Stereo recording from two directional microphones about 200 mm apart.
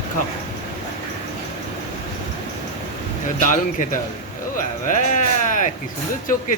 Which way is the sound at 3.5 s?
40° left (ahead or behind).